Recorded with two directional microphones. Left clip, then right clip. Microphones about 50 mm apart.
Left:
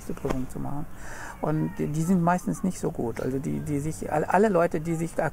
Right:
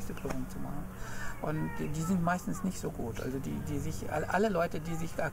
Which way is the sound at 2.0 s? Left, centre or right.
Left.